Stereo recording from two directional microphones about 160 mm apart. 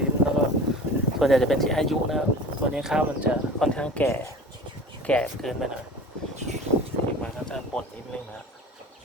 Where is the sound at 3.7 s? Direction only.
5° left (ahead or behind).